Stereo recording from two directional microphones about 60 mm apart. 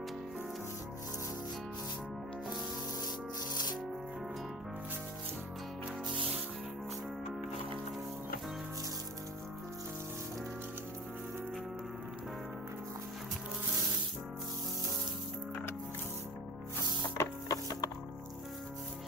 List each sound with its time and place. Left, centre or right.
17.2 s music: left